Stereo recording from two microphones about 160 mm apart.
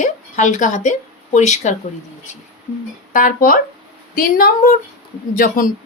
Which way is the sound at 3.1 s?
60° left (ahead or behind).